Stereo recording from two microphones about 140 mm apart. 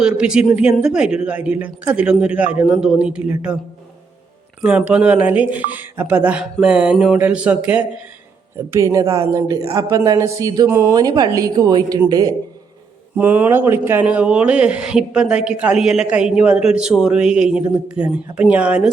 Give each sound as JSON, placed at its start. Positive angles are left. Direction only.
{"t": 0.0, "sound": "a man's voice", "side_deg": -5}
{"t": 4.6, "sound": "a man's voice", "side_deg": -5}
{"t": 8.5, "sound": "speech", "side_deg": -20}
{"t": 13.1, "sound": "a man's voice", "side_deg": -10}